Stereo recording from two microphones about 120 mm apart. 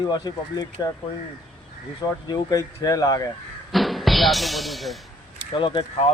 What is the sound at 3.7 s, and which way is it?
Speech, centre (ahead or behind).